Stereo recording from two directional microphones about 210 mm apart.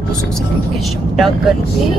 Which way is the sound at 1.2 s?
Centre (ahead or behind).